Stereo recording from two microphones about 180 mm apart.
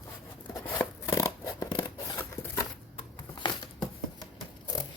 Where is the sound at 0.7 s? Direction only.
20° left (ahead or behind).